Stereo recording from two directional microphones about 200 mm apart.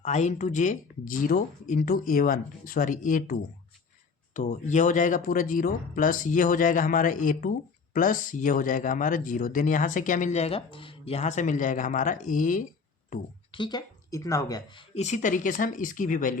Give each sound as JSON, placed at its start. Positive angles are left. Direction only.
{"t": 0.0, "sound": "speech", "side_deg": 35}
{"t": 13.5, "sound": "speech", "side_deg": 20}